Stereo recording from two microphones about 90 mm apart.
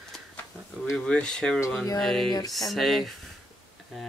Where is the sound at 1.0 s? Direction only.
10° left (ahead or behind).